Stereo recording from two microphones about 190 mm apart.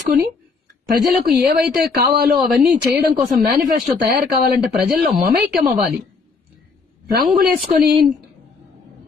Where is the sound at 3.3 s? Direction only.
50° right (ahead or behind).